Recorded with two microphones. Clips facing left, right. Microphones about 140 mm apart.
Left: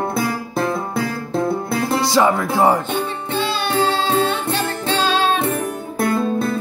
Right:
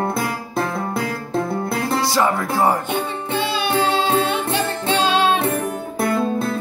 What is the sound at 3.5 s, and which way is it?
Music, 20° right (ahead or behind).